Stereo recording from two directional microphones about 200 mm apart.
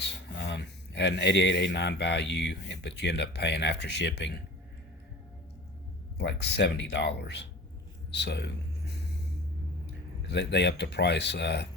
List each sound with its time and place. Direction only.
0.0 s speech: 55° left (ahead or behind)
6.1 s speech: 60° left (ahead or behind)
10.2 s speech: 60° left (ahead or behind)